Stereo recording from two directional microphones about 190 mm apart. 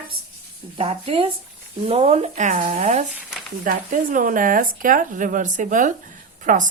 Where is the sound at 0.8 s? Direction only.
30° right (ahead or behind).